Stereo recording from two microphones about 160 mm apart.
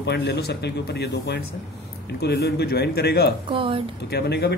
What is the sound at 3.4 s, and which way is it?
Speech, 35° right (ahead or behind).